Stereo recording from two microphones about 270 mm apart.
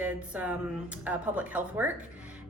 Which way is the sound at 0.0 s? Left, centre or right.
Centre.